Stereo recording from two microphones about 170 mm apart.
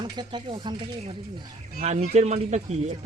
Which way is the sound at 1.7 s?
45° right (ahead or behind).